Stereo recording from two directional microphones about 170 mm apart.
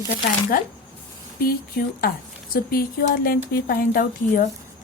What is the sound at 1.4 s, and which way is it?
A woman's voice, 60° left (ahead or behind).